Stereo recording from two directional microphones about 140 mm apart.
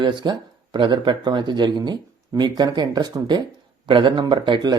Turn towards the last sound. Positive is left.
turn(degrees=-30)  # may be behind; listen again after turning